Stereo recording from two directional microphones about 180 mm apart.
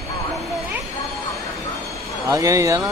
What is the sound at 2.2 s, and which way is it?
Speech, 20° right (ahead or behind).